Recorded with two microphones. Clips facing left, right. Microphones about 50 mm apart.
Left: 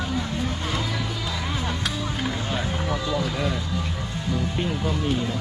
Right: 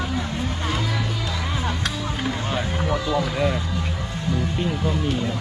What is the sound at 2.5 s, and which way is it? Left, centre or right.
Speech, centre.